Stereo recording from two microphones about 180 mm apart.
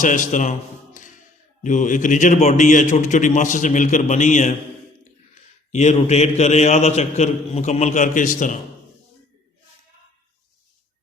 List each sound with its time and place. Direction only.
0.0 s a man's voice: 45° left (ahead or behind)
1.6 s a man's voice: 45° left (ahead or behind)
5.7 s a man's voice: 40° left (ahead or behind)